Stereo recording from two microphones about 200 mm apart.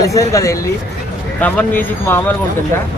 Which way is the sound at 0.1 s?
15° left (ahead or behind).